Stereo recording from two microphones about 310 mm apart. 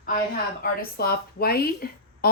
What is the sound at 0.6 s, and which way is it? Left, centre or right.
A woman's voice, left.